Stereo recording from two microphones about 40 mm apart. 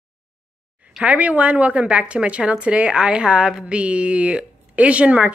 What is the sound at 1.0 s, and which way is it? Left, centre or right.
A woman's voice, right.